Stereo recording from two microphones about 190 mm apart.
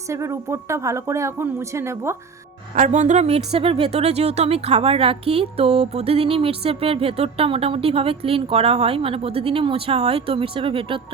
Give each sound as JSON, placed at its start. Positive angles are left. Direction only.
{"t": 0.1, "sound": "speech", "side_deg": -15}
{"t": 2.7, "sound": "a woman's voice", "side_deg": -40}